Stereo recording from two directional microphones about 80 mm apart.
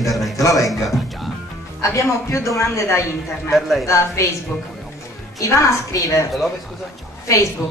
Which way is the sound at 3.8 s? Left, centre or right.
Left.